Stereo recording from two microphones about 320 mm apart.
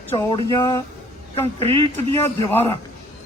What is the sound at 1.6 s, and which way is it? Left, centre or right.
Speech, centre.